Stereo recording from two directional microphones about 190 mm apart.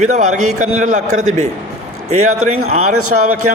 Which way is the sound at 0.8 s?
40° right (ahead or behind).